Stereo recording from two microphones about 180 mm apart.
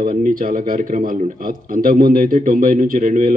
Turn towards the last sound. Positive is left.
turn(degrees=-50)  # may be behind; listen again after turning